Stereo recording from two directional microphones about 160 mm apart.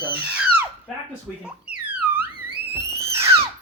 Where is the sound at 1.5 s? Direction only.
10° right (ahead or behind).